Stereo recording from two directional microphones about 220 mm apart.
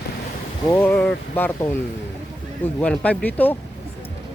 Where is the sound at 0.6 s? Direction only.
10° left (ahead or behind).